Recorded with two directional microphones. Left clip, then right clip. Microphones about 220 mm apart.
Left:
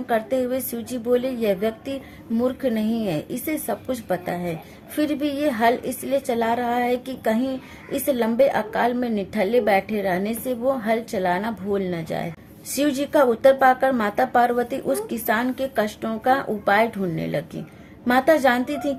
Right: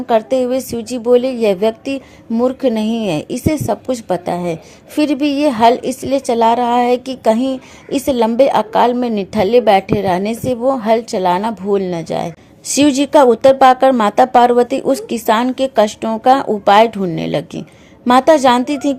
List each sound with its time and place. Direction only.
0.1 s a woman's voice: 30° right (ahead or behind)